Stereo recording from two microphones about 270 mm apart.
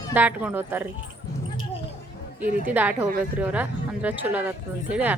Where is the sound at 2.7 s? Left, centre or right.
Centre.